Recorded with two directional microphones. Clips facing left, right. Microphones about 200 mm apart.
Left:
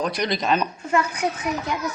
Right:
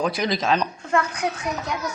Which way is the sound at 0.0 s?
Centre (ahead or behind).